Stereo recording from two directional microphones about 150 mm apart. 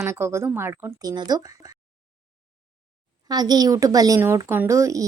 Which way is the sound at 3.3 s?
25° right (ahead or behind).